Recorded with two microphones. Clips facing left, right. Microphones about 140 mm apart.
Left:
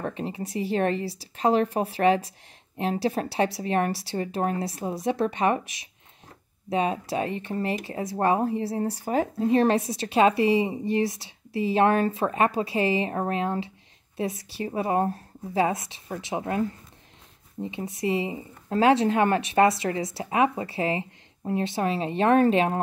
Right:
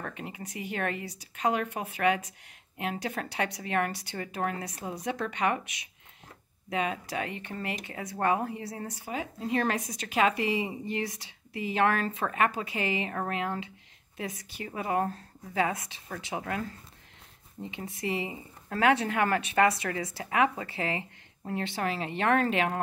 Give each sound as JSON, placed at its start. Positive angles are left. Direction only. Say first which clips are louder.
{"t": 0.0, "sound": "a woman's voice", "louder": "left 8 dB", "side_deg": 25}
{"t": 6.7, "sound": "a woman's voice", "louder": "left 6 dB", "side_deg": 30}
{"t": 9.0, "sound": "speech", "louder": "left 10 dB", "side_deg": 45}
{"t": 9.4, "sound": "a woman's voice", "louder": "left 7 dB", "side_deg": 25}